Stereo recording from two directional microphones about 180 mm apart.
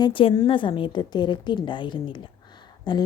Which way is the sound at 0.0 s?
30° left (ahead or behind).